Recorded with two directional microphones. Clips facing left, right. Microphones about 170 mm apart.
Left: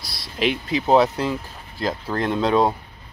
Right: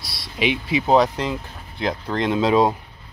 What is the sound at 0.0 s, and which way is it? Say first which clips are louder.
Speech: even; centre (ahead or behind).